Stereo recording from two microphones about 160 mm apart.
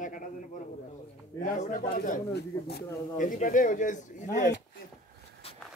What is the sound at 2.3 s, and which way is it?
Speech, 85° left.